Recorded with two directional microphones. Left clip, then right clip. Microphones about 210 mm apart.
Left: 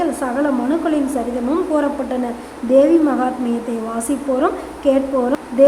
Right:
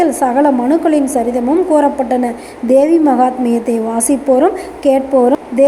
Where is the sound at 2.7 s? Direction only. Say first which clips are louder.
Right 3 dB; 15° right (ahead or behind).